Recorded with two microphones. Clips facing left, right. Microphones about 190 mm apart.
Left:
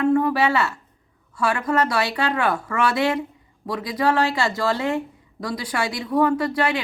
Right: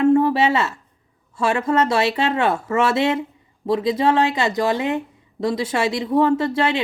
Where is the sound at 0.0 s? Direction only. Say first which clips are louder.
Right 3 dB; 25° right (ahead or behind).